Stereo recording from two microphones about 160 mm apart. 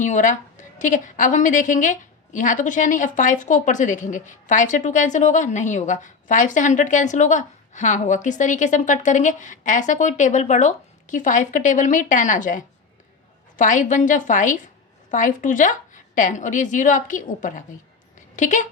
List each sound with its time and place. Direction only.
0.0 s a woman's voice: 50° left (ahead or behind)